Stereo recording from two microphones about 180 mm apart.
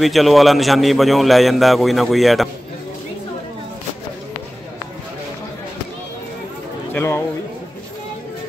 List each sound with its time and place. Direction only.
0.0 s a man's voice: centre (ahead or behind)
6.9 s a man's voice: 15° left (ahead or behind)